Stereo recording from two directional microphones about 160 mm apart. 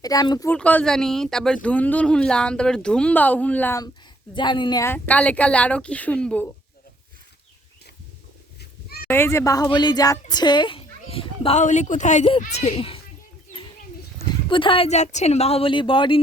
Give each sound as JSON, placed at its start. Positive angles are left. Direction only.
{"t": 0.0, "sound": "speech", "side_deg": 25}
{"t": 0.5, "sound": "speech", "side_deg": 10}
{"t": 4.4, "sound": "speech", "side_deg": 30}
{"t": 4.8, "sound": "speech", "side_deg": 10}
{"t": 9.0, "sound": "speech", "side_deg": 15}
{"t": 14.3, "sound": "speech", "side_deg": 30}